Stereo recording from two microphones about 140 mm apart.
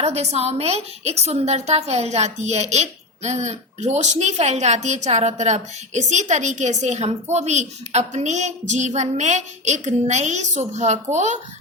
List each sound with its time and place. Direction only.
0.0 s a woman's voice: 50° right (ahead or behind)